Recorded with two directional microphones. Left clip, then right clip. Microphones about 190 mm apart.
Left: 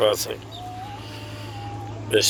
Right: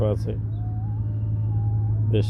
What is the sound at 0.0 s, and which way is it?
Speech, centre (ahead or behind).